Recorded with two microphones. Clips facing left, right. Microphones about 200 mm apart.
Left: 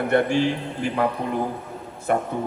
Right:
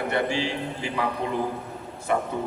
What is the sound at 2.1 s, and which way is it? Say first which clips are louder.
Speech: left 3 dB; 50° left (ahead or behind).